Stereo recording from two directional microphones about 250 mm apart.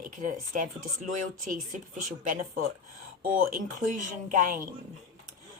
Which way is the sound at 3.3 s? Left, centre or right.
Right.